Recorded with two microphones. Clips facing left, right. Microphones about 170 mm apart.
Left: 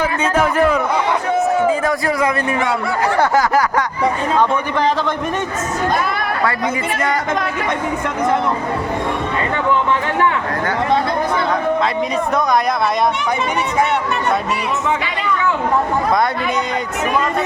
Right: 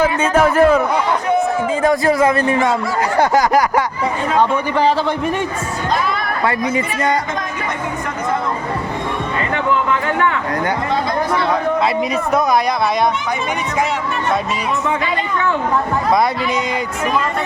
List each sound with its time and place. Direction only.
0.0 s a man's voice: 45° right (ahead or behind)
1.8 s speech: 20° right (ahead or behind)
3.2 s a man's voice: 15° right (ahead or behind)